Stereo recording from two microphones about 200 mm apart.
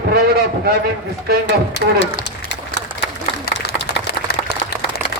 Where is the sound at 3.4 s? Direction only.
55° left (ahead or behind).